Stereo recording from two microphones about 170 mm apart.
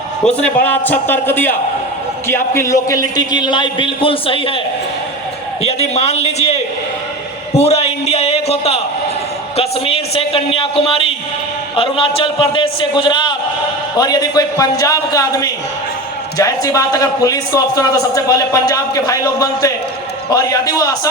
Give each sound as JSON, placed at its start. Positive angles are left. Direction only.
{"t": 0.3, "sound": "a man's voice", "side_deg": 10}
{"t": 5.6, "sound": "a man's voice", "side_deg": 40}
{"t": 7.5, "sound": "a sound", "side_deg": 40}
{"t": 9.6, "sound": "a man's voice", "side_deg": 35}